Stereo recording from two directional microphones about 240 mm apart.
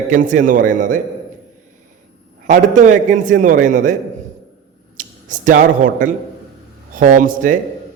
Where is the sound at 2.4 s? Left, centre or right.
Right.